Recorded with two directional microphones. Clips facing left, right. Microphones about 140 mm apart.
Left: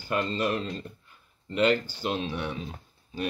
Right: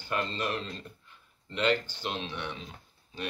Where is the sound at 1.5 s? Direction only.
45° left (ahead or behind).